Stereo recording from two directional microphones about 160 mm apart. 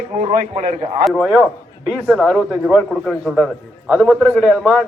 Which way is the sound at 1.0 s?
Centre (ahead or behind).